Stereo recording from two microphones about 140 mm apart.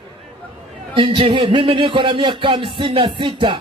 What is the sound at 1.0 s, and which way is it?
Speech, 35° right (ahead or behind).